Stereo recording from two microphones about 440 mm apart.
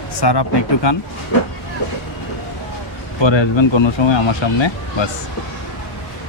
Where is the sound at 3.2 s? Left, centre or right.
Left.